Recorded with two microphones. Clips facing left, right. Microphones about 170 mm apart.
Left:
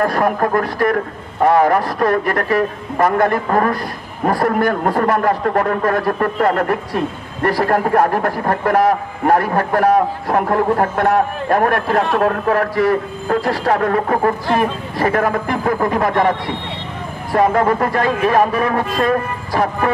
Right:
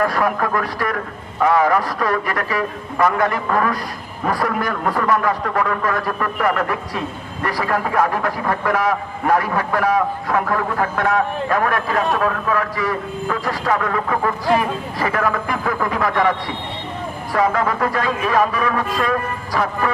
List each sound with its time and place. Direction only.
0.0 s a man's voice: 45° left (ahead or behind)
4.3 s a man's voice: 55° left (ahead or behind)
13.5 s a man's voice: 45° left (ahead or behind)